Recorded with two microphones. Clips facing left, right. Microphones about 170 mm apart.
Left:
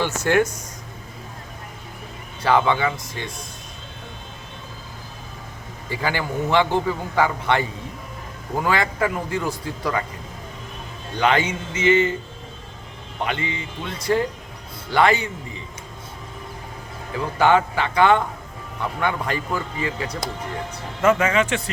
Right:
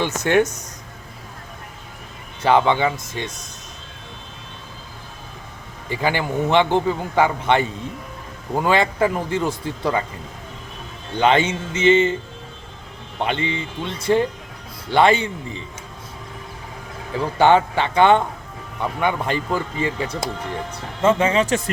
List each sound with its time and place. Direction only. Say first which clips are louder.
0.0 s a man's voice: right 2 dB; 20° right (ahead or behind)
2.4 s a man's voice: right 2 dB; 20° right (ahead or behind)
5.9 s a man's voice: right 3 dB; 20° right (ahead or behind)
11.2 s a man's voice: right 3 dB; 25° right (ahead or behind)
13.2 s a man's voice: right 3 dB; 25° right (ahead or behind)
17.3 s a man's voice: right 2 dB; 25° right (ahead or behind)